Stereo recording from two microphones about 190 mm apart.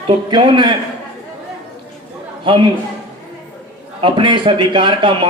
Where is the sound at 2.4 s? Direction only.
25° right (ahead or behind).